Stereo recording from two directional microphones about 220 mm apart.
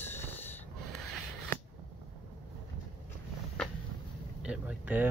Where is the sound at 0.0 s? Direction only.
10° left (ahead or behind).